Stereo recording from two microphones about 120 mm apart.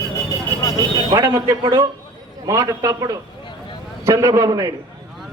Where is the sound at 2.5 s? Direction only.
25° right (ahead or behind).